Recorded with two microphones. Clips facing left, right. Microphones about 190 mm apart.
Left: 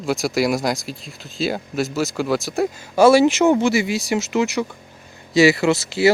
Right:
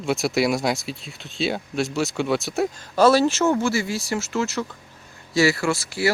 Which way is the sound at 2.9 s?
10° left (ahead or behind).